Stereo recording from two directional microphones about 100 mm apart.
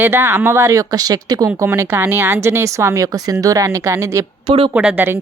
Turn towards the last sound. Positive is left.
turn(degrees=-10)  # may be behind; listen again after turning